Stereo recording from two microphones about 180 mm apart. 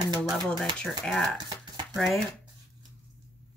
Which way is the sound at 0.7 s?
Centre (ahead or behind).